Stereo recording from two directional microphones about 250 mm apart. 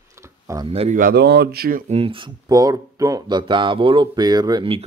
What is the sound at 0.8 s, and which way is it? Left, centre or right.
Speech, right.